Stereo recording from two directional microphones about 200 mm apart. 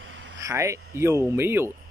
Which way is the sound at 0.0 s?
70° right (ahead or behind).